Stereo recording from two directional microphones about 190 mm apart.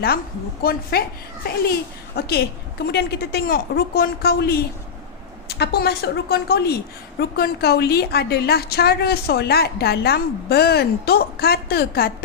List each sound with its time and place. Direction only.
0.6 s a woman's voice: 50° left (ahead or behind)